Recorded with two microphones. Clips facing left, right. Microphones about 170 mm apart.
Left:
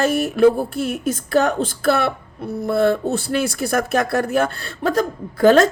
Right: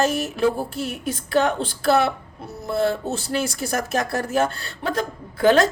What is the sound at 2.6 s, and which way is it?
Speech, 55° left (ahead or behind).